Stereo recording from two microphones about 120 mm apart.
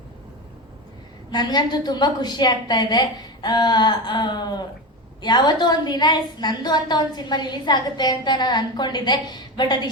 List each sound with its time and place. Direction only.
1.3 s a woman's voice: 35° left (ahead or behind)